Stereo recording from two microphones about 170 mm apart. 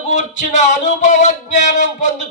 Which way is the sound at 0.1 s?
45° left (ahead or behind).